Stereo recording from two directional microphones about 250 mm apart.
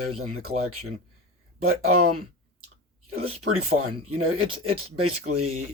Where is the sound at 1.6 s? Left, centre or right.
Right.